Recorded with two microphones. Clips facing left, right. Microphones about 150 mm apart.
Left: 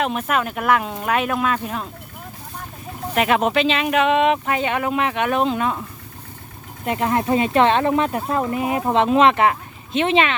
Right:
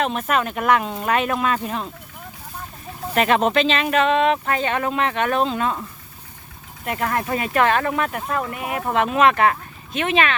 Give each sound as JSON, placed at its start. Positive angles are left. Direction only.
{"t": 0.0, "sound": "speech", "side_deg": 10}
{"t": 3.2, "sound": "speech", "side_deg": 5}
{"t": 6.8, "sound": "speech", "side_deg": 25}